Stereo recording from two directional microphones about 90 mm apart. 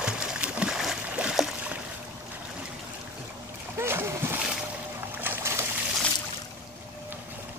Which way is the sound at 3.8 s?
25° right (ahead or behind).